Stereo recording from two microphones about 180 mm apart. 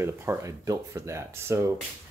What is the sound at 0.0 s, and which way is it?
Speech, 15° right (ahead or behind).